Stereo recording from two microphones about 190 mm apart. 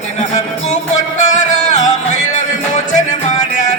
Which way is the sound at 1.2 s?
40° left (ahead or behind).